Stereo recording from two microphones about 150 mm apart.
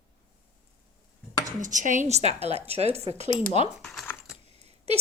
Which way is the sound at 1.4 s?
60° right (ahead or behind).